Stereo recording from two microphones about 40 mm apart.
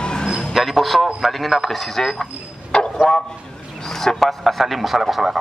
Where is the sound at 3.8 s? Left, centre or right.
Centre.